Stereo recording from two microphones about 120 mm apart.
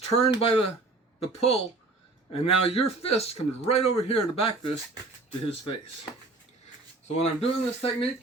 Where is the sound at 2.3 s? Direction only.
55° left (ahead or behind).